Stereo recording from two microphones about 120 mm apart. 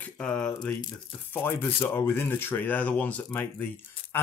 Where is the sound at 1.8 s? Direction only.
20° left (ahead or behind).